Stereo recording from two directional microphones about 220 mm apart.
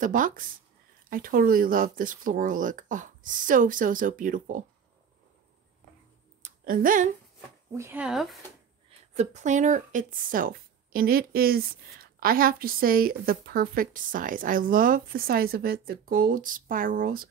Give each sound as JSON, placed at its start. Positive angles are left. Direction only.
{"t": 0.0, "sound": "speech", "side_deg": -35}
{"t": 6.4, "sound": "a sound", "side_deg": -40}
{"t": 7.7, "sound": "speech", "side_deg": -10}
{"t": 9.1, "sound": "speech", "side_deg": -30}